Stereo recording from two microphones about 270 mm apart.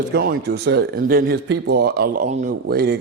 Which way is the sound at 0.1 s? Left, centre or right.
Right.